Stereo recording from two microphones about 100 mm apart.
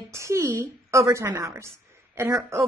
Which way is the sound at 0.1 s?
30° right (ahead or behind).